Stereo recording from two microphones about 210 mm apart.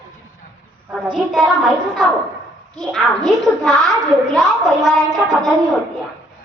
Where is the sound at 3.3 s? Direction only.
Centre (ahead or behind).